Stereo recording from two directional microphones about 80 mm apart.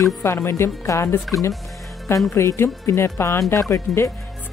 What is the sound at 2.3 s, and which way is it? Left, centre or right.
Speech, left.